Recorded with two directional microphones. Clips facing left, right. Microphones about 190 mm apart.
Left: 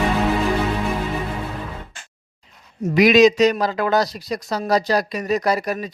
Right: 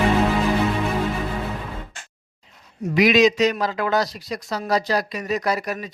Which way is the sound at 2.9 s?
40° left (ahead or behind).